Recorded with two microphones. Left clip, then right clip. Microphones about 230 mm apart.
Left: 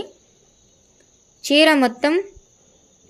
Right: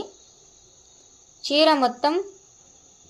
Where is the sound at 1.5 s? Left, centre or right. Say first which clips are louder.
Left 4 dB; left.